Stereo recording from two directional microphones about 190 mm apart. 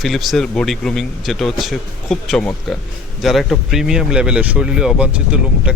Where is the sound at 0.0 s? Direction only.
Centre (ahead or behind).